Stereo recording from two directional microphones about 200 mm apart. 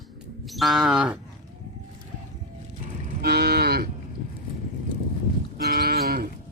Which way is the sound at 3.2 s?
55° right (ahead or behind).